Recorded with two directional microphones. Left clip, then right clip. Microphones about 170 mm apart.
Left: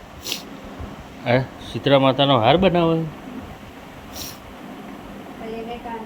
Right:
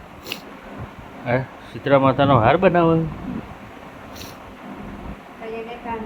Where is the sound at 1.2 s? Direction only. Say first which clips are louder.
Left 3 dB; centre (ahead or behind).